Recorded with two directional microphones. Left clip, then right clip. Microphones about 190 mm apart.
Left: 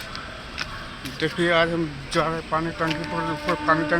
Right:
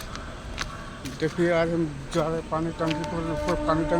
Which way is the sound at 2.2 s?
15° left (ahead or behind).